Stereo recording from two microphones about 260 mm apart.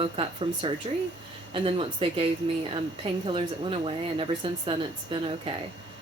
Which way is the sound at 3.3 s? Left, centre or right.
Right.